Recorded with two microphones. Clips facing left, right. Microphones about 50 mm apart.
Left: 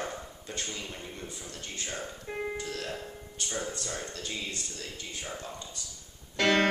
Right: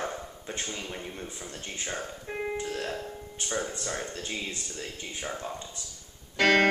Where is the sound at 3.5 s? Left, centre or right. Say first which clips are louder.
Right 4 dB; centre.